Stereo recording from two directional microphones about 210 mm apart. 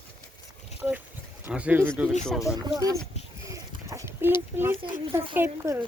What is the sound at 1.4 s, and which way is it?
Speech, 5° right (ahead or behind).